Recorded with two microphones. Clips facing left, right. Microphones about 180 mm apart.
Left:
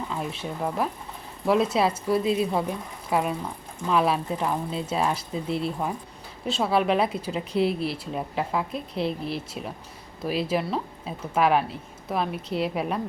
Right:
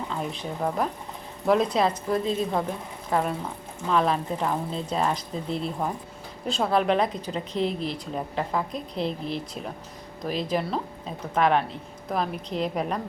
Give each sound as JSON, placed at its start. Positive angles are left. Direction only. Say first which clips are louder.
{"t": 0.1, "sound": "a woman's voice", "louder": "even", "side_deg": 5}